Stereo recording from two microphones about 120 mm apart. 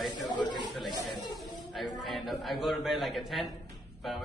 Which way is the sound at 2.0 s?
Centre (ahead or behind).